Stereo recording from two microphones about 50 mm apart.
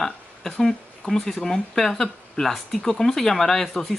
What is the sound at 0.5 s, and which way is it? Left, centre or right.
Speech, centre.